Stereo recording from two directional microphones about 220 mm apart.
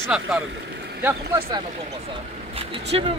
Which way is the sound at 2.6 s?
25° right (ahead or behind).